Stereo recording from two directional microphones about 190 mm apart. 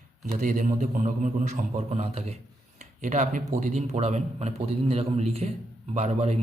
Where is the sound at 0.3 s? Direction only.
45° right (ahead or behind).